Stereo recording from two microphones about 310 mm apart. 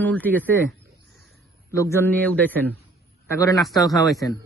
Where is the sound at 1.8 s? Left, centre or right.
Centre.